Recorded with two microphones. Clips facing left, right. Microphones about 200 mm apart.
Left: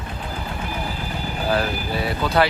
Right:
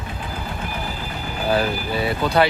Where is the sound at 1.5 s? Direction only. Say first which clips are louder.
Right 2 dB; centre (ahead or behind).